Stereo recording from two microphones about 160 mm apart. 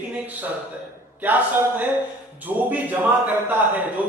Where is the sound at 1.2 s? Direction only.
10° right (ahead or behind).